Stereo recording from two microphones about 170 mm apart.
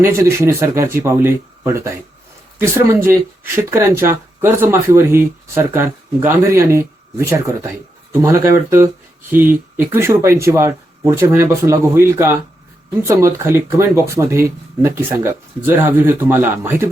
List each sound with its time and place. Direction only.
0.0 s speech: 15° right (ahead or behind)